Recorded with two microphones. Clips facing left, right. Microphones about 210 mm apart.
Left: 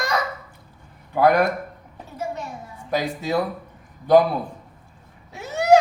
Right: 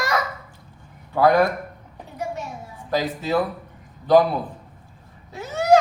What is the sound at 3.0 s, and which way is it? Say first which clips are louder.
Speech: right 1 dB; 10° left (ahead or behind).